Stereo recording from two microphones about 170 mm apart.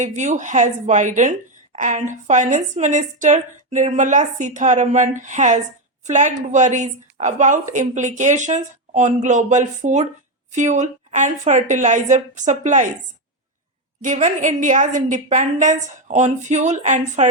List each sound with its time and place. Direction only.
0.0 s a woman's voice: 45° right (ahead or behind)
14.0 s a woman's voice: 45° right (ahead or behind)